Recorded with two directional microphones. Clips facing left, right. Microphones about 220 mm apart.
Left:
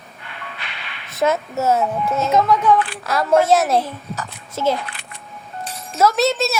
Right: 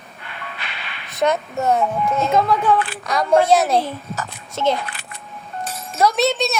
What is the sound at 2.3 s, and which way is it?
Speech, 30° right (ahead or behind).